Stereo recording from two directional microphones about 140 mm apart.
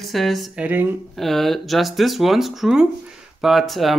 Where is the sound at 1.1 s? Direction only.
Centre (ahead or behind).